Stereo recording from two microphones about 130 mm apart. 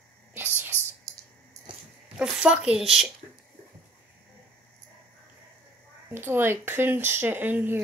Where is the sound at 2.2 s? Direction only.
5° right (ahead or behind).